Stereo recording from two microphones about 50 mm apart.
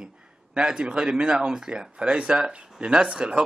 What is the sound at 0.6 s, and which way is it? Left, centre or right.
Speech, centre.